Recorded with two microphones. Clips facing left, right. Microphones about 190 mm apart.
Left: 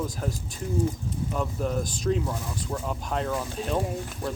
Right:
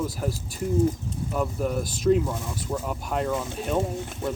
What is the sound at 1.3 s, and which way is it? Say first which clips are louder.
Speech: right 3 dB; 5° right (ahead or behind).